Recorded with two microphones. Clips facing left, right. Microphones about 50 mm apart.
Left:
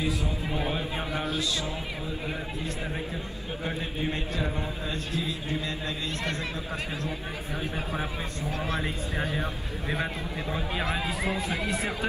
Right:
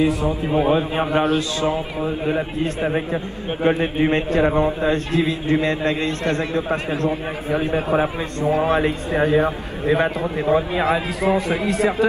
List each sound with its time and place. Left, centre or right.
0.0 s a man's voice: right
0.7 s a man's voice: right
8.5 s speech: centre
9.1 s a man's voice: right